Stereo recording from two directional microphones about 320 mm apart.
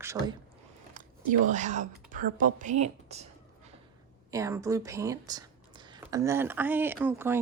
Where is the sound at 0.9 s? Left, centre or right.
Right.